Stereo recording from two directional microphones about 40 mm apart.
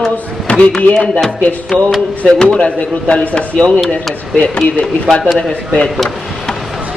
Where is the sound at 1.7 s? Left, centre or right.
Left.